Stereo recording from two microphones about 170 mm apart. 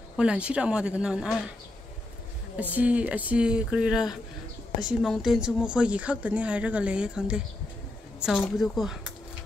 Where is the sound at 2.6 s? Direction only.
10° right (ahead or behind).